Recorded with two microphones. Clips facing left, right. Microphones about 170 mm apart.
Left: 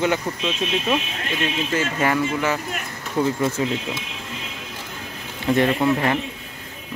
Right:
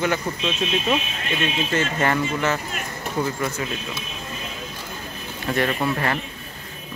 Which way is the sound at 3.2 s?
25° left (ahead or behind).